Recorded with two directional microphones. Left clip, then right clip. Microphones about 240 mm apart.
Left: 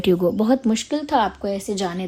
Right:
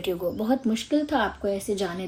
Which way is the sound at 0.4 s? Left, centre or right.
Left.